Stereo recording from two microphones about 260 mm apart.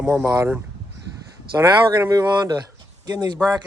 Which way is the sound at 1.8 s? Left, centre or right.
Centre.